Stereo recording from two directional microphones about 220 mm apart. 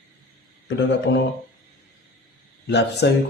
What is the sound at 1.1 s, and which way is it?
Speech, 50° left (ahead or behind).